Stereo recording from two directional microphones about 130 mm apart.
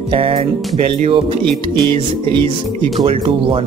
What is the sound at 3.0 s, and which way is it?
Speech, 45° right (ahead or behind).